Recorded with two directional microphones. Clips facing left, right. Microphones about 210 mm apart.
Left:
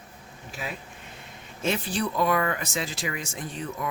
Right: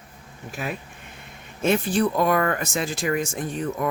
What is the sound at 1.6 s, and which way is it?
Speech, 50° right (ahead or behind).